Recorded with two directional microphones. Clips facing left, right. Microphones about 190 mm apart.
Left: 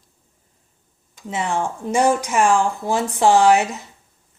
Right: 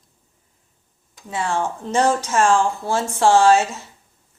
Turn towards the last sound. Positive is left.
turn(degrees=15)  # may be behind; listen again after turning